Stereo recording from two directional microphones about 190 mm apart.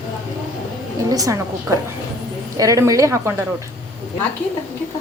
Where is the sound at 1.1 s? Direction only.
20° right (ahead or behind).